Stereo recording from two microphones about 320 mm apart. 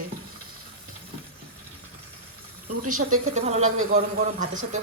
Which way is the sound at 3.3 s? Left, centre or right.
Right.